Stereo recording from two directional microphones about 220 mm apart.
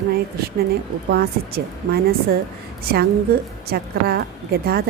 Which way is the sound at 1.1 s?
45° right (ahead or behind).